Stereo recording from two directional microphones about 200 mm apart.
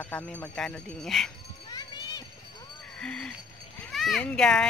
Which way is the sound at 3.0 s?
5° left (ahead or behind).